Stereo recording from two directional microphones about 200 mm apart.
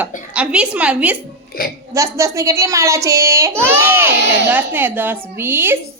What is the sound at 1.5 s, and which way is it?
Speech, 50° left (ahead or behind).